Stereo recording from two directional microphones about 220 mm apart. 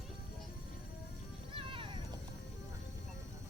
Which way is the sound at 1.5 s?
25° right (ahead or behind).